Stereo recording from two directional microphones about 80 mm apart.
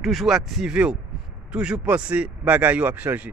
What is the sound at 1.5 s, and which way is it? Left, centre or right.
Speech, centre.